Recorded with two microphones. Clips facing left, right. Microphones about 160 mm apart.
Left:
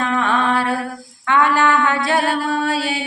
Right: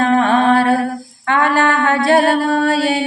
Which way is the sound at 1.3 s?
45° right (ahead or behind).